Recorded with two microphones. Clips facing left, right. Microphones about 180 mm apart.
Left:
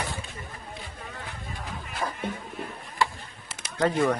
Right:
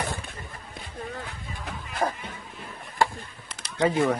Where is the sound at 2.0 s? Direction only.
35° right (ahead or behind).